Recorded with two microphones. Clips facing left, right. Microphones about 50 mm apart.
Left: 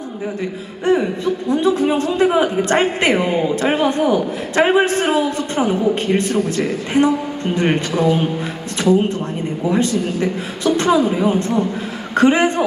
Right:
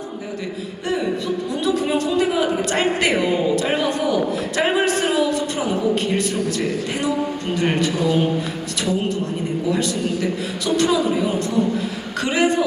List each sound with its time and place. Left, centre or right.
0.9 s a man's voice: left
9.6 s a man's voice: left